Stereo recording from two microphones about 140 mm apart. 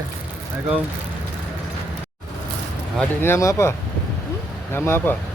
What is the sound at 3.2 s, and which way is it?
Speech, 20° left (ahead or behind).